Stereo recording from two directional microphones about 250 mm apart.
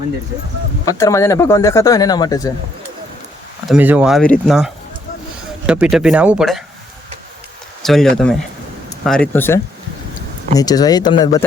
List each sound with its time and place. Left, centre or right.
0.9 s speech: centre
3.7 s speech: centre
7.8 s speech: centre